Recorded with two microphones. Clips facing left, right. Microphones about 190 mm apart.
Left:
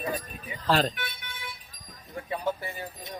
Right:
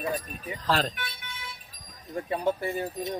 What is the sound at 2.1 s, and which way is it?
Speech, 45° right (ahead or behind).